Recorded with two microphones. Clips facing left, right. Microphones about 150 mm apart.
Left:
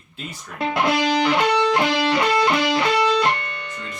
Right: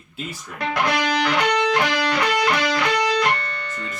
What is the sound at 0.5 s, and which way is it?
Music, 25° left (ahead or behind).